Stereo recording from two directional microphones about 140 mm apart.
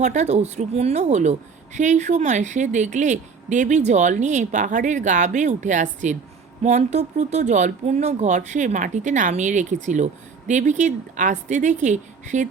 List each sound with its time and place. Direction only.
0.0 s a woman's voice: 55° right (ahead or behind)